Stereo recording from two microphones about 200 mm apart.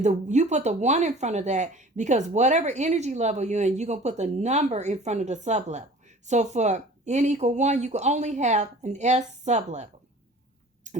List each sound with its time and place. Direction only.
0.0 s speech: 35° right (ahead or behind)